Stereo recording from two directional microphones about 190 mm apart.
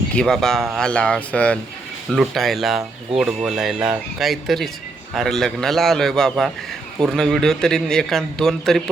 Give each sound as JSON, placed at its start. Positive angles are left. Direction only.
{"t": 0.1, "sound": "a man's voice", "side_deg": 5}